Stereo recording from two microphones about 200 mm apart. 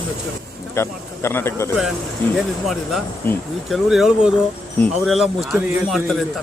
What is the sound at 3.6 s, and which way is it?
A man's voice, centre (ahead or behind).